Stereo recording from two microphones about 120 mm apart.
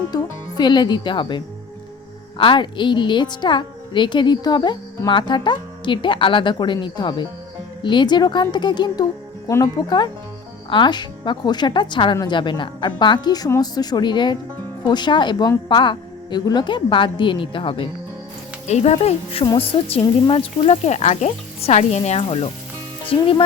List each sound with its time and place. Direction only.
0.1 s a woman's voice: 35° left (ahead or behind)
2.4 s a woman's voice: 45° left (ahead or behind)
18.7 s speech: 65° left (ahead or behind)
22.2 s speech: 55° left (ahead or behind)